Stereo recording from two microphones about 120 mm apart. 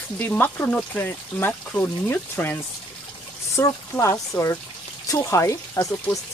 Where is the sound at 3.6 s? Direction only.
25° left (ahead or behind).